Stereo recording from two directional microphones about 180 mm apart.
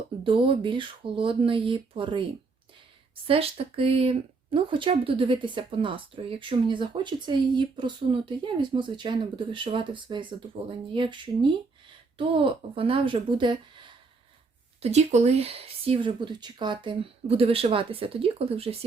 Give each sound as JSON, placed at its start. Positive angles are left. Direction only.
{"t": 0.3, "sound": "speech", "side_deg": -30}
{"t": 3.2, "sound": "speech", "side_deg": -30}